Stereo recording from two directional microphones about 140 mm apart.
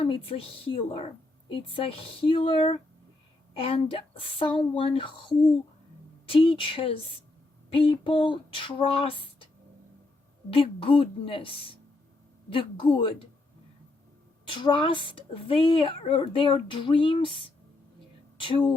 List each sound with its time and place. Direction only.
0.0 s speech: 45° left (ahead or behind)
10.5 s speech: 40° left (ahead or behind)
14.4 s a woman's voice: 35° left (ahead or behind)